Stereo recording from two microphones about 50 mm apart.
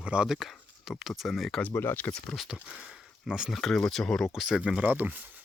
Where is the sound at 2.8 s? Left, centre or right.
Centre.